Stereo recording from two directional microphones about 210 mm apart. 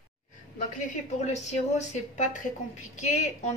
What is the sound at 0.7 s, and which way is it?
Speech, 35° left (ahead or behind).